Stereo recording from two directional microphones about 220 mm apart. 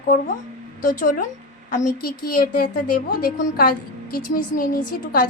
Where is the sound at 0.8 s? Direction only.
40° left (ahead or behind).